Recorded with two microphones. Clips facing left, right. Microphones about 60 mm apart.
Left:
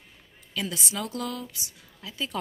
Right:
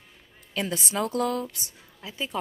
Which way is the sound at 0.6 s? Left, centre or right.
Right.